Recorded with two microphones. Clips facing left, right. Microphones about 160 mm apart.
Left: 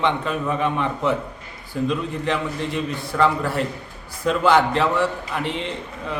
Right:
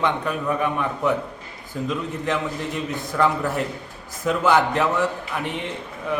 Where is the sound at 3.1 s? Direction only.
Centre (ahead or behind).